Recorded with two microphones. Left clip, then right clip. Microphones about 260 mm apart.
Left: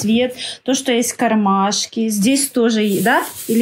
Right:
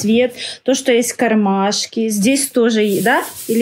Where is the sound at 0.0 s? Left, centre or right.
Centre.